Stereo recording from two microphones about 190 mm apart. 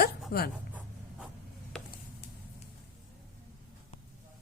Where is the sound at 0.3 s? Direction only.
60° left (ahead or behind).